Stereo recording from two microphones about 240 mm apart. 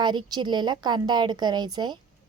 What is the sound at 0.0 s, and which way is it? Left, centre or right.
A woman's voice, centre.